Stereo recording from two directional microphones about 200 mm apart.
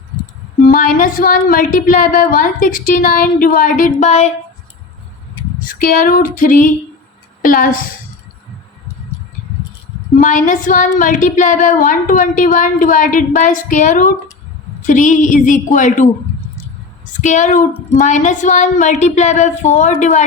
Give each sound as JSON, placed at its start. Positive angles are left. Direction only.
{"t": 0.7, "sound": "a woman's voice", "side_deg": 40}
{"t": 5.6, "sound": "a woman's voice", "side_deg": 45}
{"t": 10.2, "sound": "a woman's voice", "side_deg": 40}
{"t": 17.1, "sound": "a woman's voice", "side_deg": 40}